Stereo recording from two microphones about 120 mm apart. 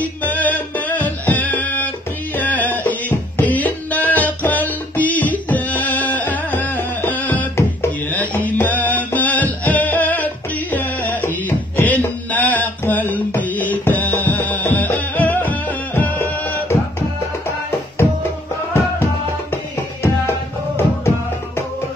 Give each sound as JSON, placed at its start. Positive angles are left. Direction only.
{"t": 0.0, "sound": "music", "side_deg": 15}
{"t": 19.5, "sound": "music", "side_deg": 20}